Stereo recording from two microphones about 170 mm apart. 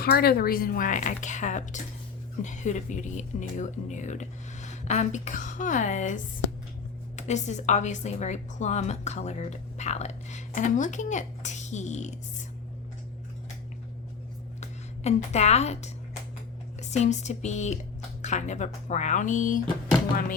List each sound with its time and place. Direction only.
0.0 s speech: 65° left (ahead or behind); by 6.1 s 45° left (ahead or behind)
7.2 s speech: 45° left (ahead or behind)
14.6 s speech: 40° left (ahead or behind)